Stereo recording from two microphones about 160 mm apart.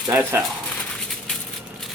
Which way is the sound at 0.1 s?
15° right (ahead or behind).